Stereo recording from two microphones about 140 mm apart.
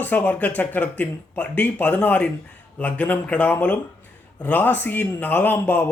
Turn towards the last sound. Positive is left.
turn(degrees=15)  # may be behind; listen again after turning